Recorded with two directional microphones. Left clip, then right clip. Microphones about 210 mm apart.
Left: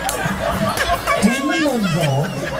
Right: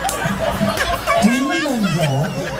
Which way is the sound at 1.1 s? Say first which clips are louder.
Right 1 dB; centre (ahead or behind).